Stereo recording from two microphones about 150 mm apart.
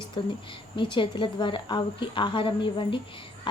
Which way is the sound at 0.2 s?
35° left (ahead or behind).